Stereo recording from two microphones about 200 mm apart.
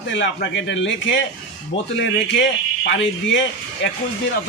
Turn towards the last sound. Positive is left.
turn(degrees=70)  # may be behind; listen again after turning